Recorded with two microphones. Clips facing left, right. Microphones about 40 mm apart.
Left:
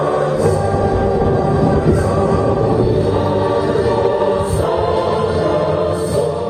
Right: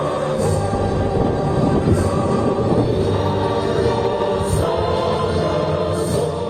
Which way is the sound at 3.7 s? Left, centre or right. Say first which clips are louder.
Left 4 dB; centre.